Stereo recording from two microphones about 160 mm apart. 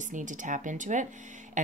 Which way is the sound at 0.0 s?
50° right (ahead or behind).